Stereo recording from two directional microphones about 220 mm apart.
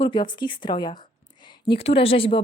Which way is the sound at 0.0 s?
20° left (ahead or behind).